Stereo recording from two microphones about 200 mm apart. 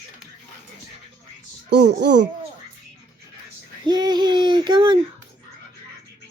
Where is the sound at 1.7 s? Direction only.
55° right (ahead or behind).